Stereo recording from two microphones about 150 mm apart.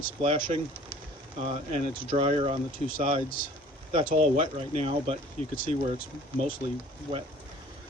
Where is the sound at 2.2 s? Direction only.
40° right (ahead or behind).